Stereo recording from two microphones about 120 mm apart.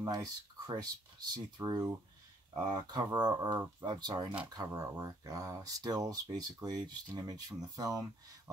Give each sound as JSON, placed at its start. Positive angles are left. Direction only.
{"t": 0.0, "sound": "speech", "side_deg": -35}